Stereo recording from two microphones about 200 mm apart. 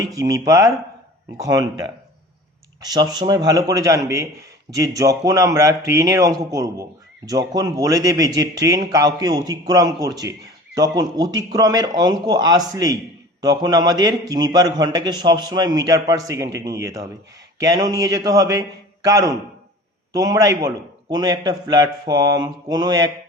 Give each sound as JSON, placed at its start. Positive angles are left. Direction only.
{"t": 0.2, "sound": "a man's voice", "side_deg": -15}